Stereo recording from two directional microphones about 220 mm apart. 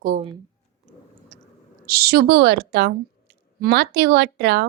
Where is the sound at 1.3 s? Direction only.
35° right (ahead or behind).